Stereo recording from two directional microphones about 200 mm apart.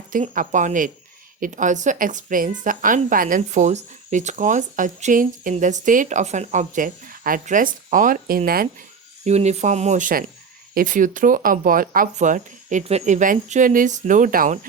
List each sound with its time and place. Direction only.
0.1 s a woman's voice: 40° right (ahead or behind)
9.2 s a woman's voice: 35° right (ahead or behind)